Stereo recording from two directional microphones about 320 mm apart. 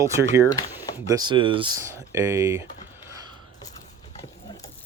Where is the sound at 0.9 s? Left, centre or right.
Centre.